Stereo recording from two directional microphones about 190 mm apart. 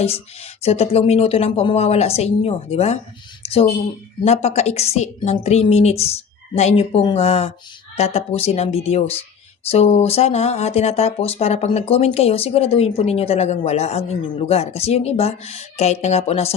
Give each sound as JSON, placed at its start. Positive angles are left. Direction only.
{"t": 0.0, "sound": "speech", "side_deg": 30}
{"t": 4.2, "sound": "speech", "side_deg": 35}